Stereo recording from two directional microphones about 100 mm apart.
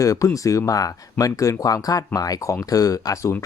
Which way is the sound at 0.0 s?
35° left (ahead or behind).